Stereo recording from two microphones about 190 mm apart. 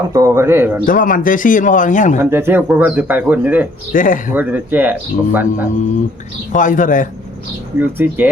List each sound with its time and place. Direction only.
0.1 s speech: 15° right (ahead or behind)
0.9 s speech: 45° left (ahead or behind)
2.3 s speech: 10° right (ahead or behind)
3.9 s speech: 45° left (ahead or behind)
4.3 s speech: 10° right (ahead or behind)
6.5 s speech: 45° left (ahead or behind)
7.8 s speech: 10° right (ahead or behind)